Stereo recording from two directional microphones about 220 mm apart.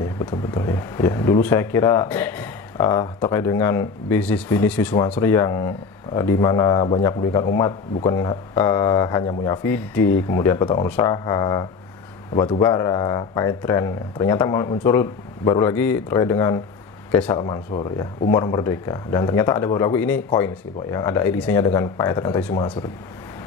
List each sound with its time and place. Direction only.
0.0 s speech: 20° left (ahead or behind)
17.3 s speech: 25° left (ahead or behind)